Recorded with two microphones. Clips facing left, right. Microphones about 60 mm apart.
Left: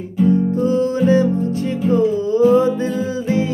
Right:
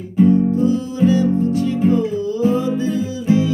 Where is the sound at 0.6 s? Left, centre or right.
Left.